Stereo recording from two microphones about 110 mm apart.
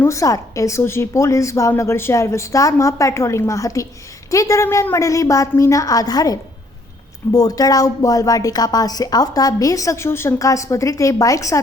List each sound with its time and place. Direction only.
0.0 s a woman's voice: 30° left (ahead or behind)